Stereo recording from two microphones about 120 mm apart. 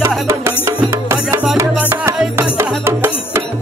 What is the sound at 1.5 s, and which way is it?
Music, 25° right (ahead or behind).